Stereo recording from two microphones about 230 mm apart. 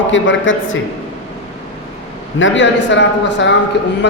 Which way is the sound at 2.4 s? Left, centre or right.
Left.